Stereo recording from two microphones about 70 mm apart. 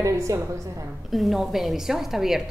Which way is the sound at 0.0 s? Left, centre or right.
Right.